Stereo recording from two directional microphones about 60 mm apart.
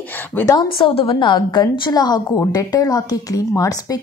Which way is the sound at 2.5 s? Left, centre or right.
Left.